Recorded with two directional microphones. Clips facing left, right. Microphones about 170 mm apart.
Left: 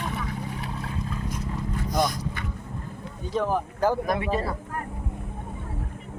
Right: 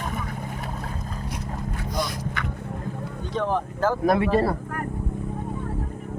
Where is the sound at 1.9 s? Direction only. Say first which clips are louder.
Left 4 dB; 45° left (ahead or behind).